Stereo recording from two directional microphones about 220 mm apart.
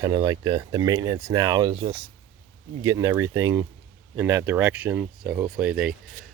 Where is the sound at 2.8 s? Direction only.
15° right (ahead or behind).